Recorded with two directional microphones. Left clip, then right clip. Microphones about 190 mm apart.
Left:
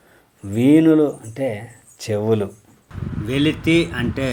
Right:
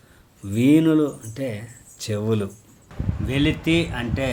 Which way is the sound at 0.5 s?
5° right (ahead or behind).